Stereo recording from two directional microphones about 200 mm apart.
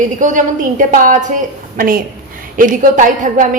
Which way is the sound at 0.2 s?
40° right (ahead or behind).